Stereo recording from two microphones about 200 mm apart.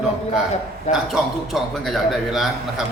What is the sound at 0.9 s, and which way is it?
A man's voice, centre (ahead or behind).